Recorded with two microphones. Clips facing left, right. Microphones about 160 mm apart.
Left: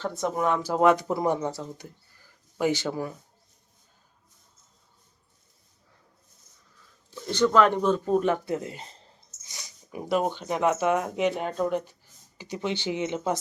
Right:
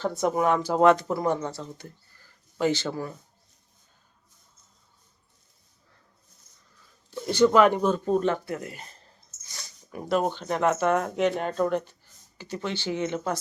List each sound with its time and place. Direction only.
0.0 s speech: 5° right (ahead or behind); by 3.2 s 15° left (ahead or behind)
7.3 s speech: 10° right (ahead or behind); by 8.4 s 5° left (ahead or behind)
8.4 s speech: 20° left (ahead or behind)